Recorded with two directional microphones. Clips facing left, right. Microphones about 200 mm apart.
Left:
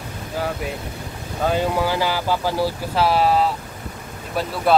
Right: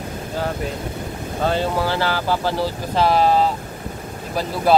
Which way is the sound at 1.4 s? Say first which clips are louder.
Even; 10° left (ahead or behind).